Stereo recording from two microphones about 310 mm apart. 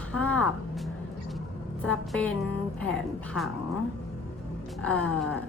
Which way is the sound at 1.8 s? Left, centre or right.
Centre.